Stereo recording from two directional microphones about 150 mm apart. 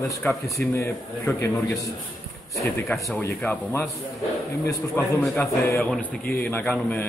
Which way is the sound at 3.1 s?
10° left (ahead or behind).